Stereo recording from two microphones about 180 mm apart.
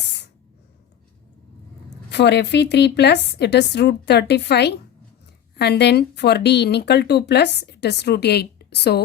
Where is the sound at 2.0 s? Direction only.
70° left (ahead or behind).